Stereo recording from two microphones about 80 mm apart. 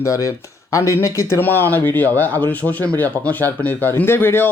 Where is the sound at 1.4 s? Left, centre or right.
Left.